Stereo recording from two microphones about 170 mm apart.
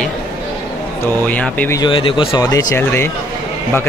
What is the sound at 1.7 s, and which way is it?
Speech, 30° left (ahead or behind).